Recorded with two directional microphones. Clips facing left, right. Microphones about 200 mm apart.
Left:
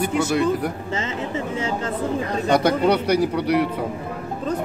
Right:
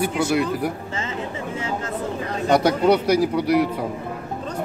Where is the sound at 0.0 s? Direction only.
10° right (ahead or behind).